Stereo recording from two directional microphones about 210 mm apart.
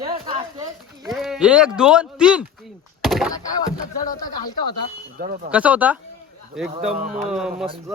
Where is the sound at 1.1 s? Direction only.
Centre (ahead or behind).